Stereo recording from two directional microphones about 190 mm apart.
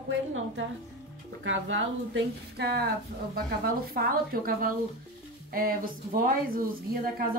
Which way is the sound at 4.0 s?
50° right (ahead or behind).